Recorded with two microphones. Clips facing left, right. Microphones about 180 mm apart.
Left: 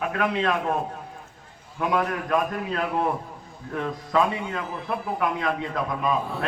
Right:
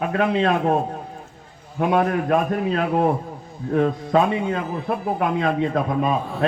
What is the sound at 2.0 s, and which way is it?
A man's voice, 30° right (ahead or behind).